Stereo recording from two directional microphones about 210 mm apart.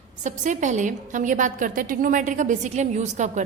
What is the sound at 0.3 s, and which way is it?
A woman's voice, 35° right (ahead or behind).